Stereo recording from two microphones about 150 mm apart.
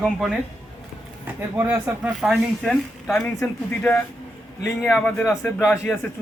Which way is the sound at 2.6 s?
5° left (ahead or behind).